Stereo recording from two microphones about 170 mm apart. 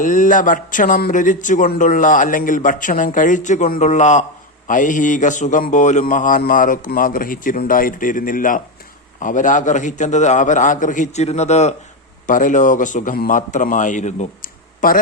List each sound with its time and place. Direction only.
0.0 s speech: 50° left (ahead or behind)